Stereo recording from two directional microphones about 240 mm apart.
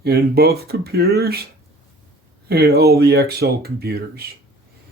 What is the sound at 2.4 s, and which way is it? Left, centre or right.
Speech, right.